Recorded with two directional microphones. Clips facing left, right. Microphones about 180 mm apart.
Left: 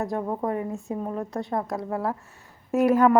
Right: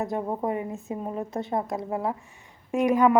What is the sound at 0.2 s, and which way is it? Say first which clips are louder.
Speech: left 1 dB; 10° right (ahead or behind).